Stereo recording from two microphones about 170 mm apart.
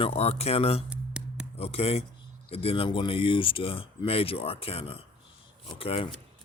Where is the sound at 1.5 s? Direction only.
35° left (ahead or behind).